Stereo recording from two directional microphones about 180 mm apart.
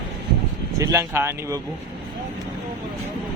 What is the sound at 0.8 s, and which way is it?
Speech, 15° right (ahead or behind).